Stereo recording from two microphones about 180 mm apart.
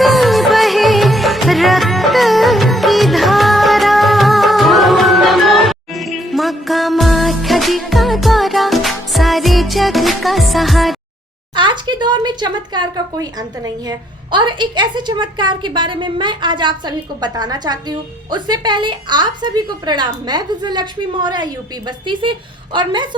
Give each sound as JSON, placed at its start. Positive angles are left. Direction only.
{"t": 0.0, "sound": "music", "side_deg": 0}
{"t": 11.5, "sound": "a sound", "side_deg": -25}
{"t": 13.8, "sound": "a woman's voice", "side_deg": -25}